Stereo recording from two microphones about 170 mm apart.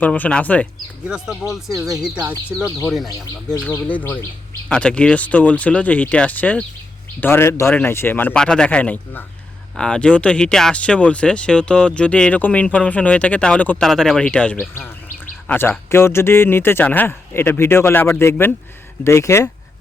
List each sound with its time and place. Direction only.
0.0 s speech: 10° left (ahead or behind)
1.0 s speech: 5° right (ahead or behind)
1.7 s speech: 20° right (ahead or behind)
2.0 s speech: 5° right (ahead or behind)
2.5 s speech: 20° right (ahead or behind)
2.8 s speech: centre (ahead or behind); by 19.5 s 15° left (ahead or behind)